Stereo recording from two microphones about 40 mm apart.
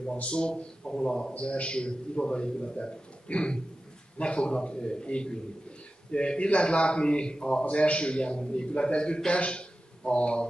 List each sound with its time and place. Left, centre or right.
0.2 s a man's voice: left